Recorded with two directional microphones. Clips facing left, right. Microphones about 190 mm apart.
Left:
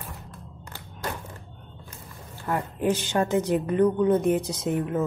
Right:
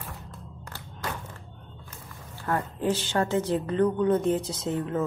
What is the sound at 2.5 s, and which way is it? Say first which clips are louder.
A woman's voice: left 2 dB; 15° left (ahead or behind).